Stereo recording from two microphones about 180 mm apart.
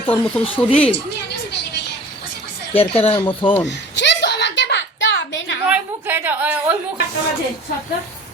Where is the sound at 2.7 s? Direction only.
30° left (ahead or behind).